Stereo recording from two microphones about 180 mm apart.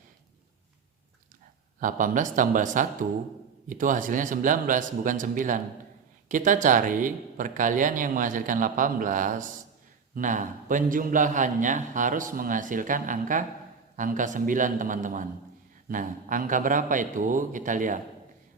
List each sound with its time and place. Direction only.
1.8 s speech: 45° right (ahead or behind)